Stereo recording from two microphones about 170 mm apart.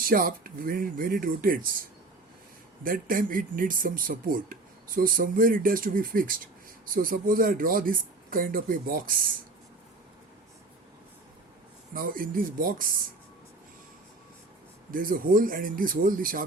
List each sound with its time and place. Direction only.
0.0 s speech: 55° right (ahead or behind)
2.8 s speech: 55° right (ahead or behind)
11.9 s speech: 55° right (ahead or behind)
14.8 s speech: 55° right (ahead or behind)